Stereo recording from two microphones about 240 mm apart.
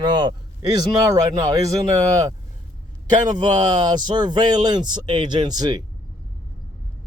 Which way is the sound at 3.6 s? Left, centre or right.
Centre.